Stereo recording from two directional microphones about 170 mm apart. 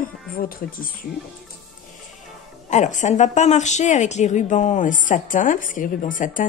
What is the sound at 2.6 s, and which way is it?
A woman's voice, 45° left (ahead or behind).